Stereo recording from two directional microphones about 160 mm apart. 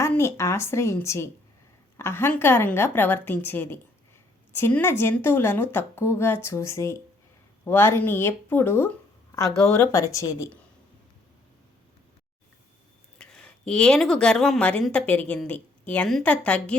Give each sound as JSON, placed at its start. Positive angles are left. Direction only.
{"t": 0.0, "sound": "a woman's voice", "side_deg": 15}
{"t": 9.9, "sound": "speech", "side_deg": 20}
{"t": 13.1, "sound": "a woman's voice", "side_deg": 5}